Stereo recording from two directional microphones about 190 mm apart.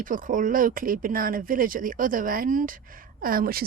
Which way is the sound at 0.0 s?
45° right (ahead or behind).